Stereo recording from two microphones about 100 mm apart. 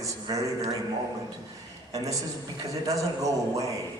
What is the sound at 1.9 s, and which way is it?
Speech, 35° right (ahead or behind).